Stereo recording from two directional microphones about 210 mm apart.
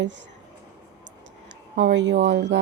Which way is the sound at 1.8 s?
55° right (ahead or behind).